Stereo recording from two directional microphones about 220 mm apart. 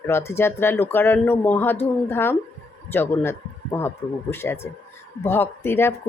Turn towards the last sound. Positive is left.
turn(degrees=10)  # may be behind; listen again after turning